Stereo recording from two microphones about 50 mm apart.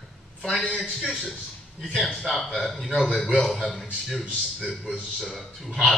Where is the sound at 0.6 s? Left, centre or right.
Left.